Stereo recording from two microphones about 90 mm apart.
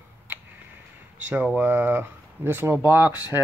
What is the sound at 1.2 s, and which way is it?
Speech, 15° right (ahead or behind).